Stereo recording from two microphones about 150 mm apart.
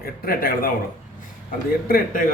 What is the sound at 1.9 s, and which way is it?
Speech, 75° left (ahead or behind).